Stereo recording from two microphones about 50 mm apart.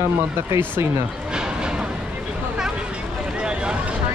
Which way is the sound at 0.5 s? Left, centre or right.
Right.